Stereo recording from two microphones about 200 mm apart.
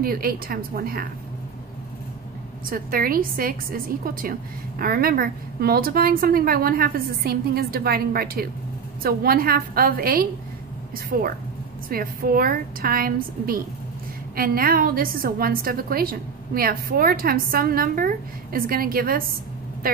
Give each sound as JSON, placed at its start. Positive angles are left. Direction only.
{"t": 0.0, "sound": "a woman's voice", "side_deg": -50}
{"t": 2.7, "sound": "a woman's voice", "side_deg": -45}